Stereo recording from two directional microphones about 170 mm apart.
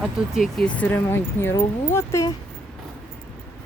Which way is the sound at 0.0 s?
Centre (ahead or behind).